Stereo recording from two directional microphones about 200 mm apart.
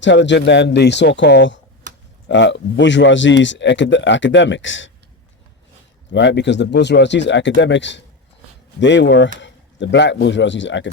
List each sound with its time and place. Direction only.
0.0 s speech: 65° left (ahead or behind)
6.1 s speech: 65° left (ahead or behind)